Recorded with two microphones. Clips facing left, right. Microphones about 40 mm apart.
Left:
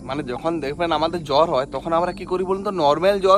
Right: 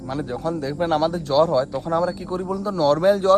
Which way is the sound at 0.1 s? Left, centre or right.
Left.